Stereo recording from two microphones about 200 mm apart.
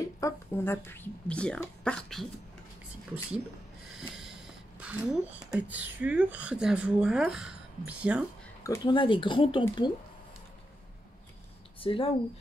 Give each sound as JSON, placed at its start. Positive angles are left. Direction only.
{"t": 0.2, "sound": "speech", "side_deg": 10}
{"t": 4.2, "sound": "speech", "side_deg": -5}
{"t": 8.6, "sound": "speech", "side_deg": 20}
{"t": 11.8, "sound": "speech", "side_deg": 25}